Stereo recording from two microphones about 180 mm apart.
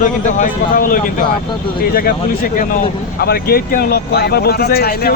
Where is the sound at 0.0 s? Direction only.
45° left (ahead or behind).